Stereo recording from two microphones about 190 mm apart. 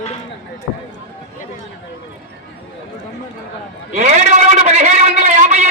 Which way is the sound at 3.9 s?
40° right (ahead or behind).